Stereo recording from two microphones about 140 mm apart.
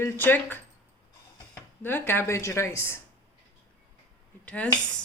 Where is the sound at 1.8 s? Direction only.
15° left (ahead or behind).